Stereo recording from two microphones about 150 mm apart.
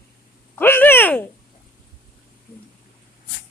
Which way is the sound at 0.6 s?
15° left (ahead or behind).